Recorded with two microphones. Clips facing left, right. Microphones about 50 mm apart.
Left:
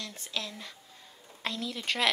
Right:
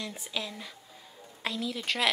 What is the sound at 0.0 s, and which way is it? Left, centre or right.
Speech, centre.